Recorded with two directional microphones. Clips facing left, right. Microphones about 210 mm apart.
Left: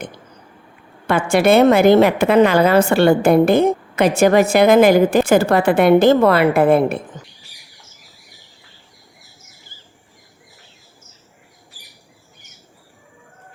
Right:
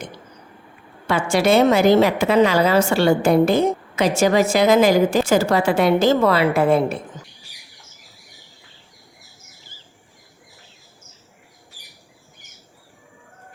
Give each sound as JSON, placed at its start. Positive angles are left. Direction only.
{"t": 1.0, "sound": "a woman's voice", "side_deg": 55}